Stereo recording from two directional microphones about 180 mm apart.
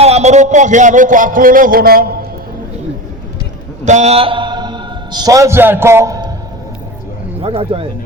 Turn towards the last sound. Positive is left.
turn(degrees=-30)  # may be behind; listen again after turning